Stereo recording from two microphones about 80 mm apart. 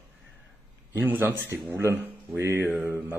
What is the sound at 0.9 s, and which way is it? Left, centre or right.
A man's voice, right.